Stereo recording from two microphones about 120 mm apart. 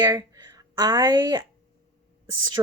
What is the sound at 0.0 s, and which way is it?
Speech, 30° right (ahead or behind).